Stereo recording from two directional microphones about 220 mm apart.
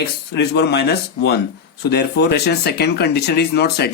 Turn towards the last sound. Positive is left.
turn(degrees=45)  # may be behind; listen again after turning